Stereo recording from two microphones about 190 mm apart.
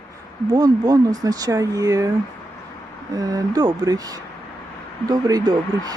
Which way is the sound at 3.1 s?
20° right (ahead or behind).